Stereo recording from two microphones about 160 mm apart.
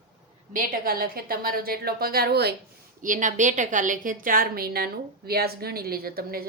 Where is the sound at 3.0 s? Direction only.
55° right (ahead or behind).